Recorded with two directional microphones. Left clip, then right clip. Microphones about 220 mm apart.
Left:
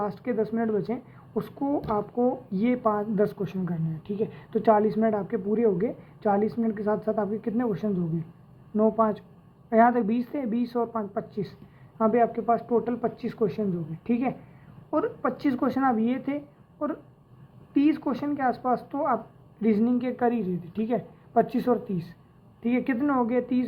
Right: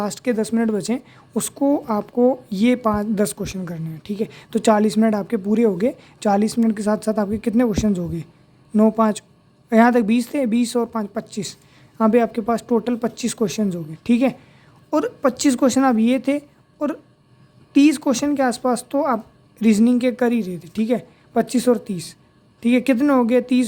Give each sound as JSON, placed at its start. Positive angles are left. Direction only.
{"t": 0.0, "sound": "a woman's voice", "side_deg": -50}
{"t": 17.7, "sound": "a woman's voice", "side_deg": -50}